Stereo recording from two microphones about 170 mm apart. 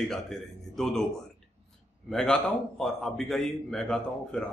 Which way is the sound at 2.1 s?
5° left (ahead or behind).